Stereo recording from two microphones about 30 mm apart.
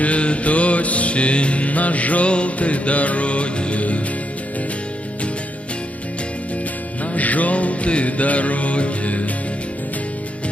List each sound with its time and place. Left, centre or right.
0.0 s music: left
7.2 s music: left